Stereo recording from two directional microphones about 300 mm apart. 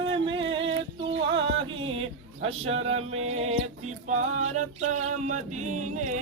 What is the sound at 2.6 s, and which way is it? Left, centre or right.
Music, right.